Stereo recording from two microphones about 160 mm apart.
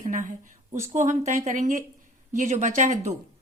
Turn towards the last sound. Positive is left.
turn(degrees=-50)  # may be behind; listen again after turning